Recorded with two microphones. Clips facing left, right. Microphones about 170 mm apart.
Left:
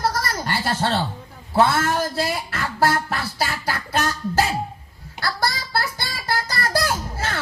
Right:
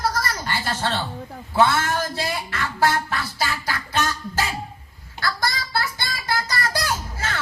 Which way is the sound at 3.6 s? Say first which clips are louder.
Left 1 dB; 35° left (ahead or behind).